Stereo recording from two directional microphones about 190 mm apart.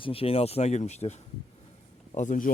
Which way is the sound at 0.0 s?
30° left (ahead or behind).